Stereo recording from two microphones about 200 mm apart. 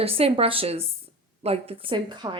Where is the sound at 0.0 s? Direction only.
30° right (ahead or behind).